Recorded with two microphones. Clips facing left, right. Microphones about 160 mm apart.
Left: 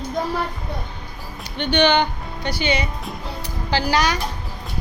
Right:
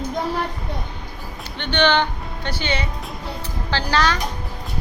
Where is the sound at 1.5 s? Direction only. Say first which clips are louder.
Left 2 dB; 15° left (ahead or behind).